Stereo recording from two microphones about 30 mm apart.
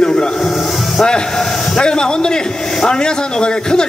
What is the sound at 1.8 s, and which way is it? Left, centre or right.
A man's voice, left.